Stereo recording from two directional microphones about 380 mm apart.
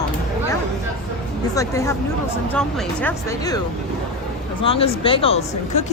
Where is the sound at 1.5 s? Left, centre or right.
Centre.